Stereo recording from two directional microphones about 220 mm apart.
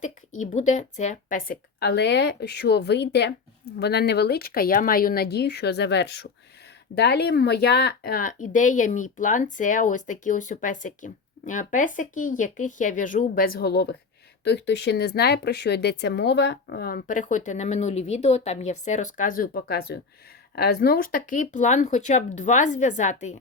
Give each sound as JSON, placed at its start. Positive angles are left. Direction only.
{"t": 0.0, "sound": "speech", "side_deg": 35}